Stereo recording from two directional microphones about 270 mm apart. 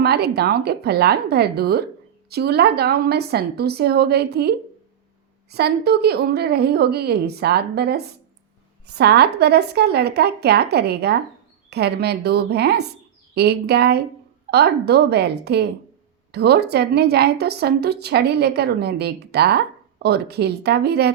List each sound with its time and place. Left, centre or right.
0.0 s a woman's voice: right